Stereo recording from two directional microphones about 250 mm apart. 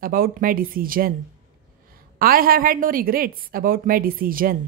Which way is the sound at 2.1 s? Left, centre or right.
Right.